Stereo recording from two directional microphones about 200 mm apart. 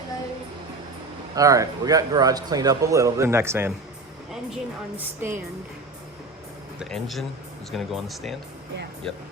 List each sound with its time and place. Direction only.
1.4 s a man's voice: 15° right (ahead or behind)
6.7 s speech: centre (ahead or behind)